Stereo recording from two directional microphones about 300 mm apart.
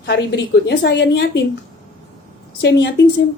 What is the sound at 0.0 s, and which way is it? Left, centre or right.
A woman's voice, left.